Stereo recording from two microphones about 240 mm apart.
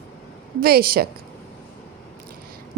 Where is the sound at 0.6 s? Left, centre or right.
Right.